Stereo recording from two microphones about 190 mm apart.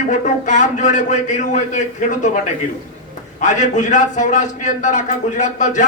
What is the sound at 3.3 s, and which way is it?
A man's voice, 40° left (ahead or behind).